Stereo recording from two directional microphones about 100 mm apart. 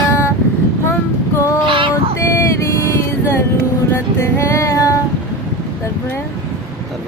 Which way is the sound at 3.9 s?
25° left (ahead or behind).